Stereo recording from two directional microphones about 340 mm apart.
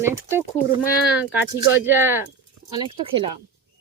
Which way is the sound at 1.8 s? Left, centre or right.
Centre.